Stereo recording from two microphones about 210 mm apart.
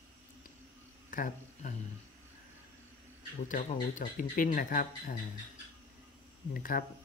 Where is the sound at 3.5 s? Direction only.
40° left (ahead or behind).